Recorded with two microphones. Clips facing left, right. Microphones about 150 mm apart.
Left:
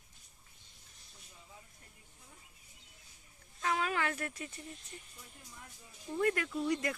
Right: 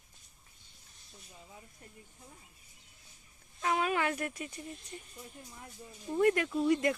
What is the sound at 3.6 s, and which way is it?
Speech, 20° right (ahead or behind).